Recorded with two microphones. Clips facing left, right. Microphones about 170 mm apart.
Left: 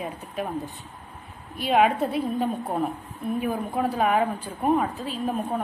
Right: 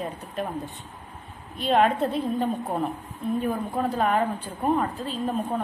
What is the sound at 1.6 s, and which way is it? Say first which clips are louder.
A woman's voice: even; 10° left (ahead or behind).